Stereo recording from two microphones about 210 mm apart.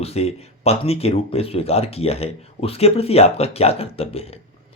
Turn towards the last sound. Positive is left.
turn(degrees=30)  # may be behind; listen again after turning